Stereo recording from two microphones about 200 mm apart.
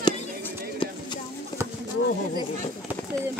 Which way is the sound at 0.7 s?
20° left (ahead or behind).